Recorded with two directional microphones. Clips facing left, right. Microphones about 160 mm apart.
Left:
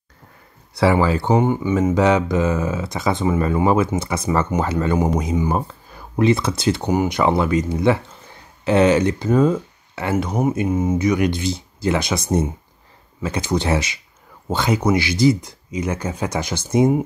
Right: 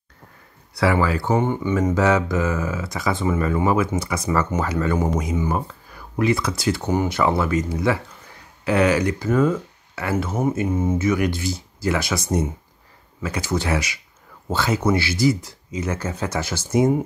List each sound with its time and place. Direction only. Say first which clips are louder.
0.7 s speech: left 3 dB; 25° left (ahead or behind)
1.4 s speech: left 3 dB; 10° left (ahead or behind)
10.1 s speech: left 2 dB; 15° left (ahead or behind)